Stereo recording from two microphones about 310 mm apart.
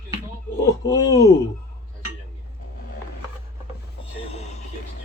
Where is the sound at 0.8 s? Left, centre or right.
Centre.